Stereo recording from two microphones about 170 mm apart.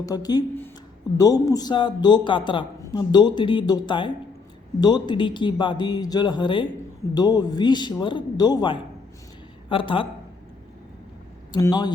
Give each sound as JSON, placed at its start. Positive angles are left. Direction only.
{"t": 0.0, "sound": "a man's voice", "side_deg": 20}
{"t": 11.5, "sound": "a man's voice", "side_deg": 25}